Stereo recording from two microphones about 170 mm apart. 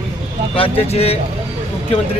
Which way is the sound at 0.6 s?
35° left (ahead or behind).